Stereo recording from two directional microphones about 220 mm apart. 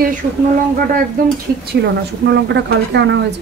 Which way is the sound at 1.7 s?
50° right (ahead or behind).